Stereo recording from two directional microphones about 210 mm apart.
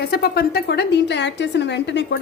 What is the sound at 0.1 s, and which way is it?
A woman's voice, 45° left (ahead or behind).